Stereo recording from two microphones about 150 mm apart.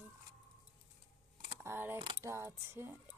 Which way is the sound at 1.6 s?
15° right (ahead or behind).